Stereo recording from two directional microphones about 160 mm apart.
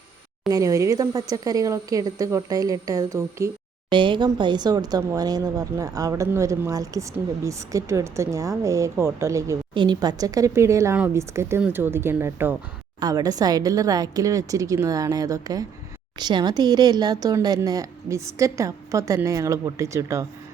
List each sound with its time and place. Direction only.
0.4 s speech: 20° right (ahead or behind)
3.8 s speech: 30° right (ahead or behind)